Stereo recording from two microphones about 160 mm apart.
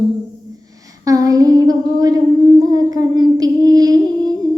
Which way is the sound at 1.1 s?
20° right (ahead or behind).